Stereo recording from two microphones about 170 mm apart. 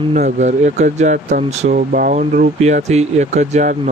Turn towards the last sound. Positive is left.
turn(degrees=-45)  # may be behind; listen again after turning